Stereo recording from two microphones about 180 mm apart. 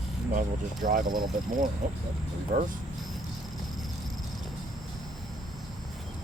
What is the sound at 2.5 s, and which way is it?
Speech, 55° right (ahead or behind).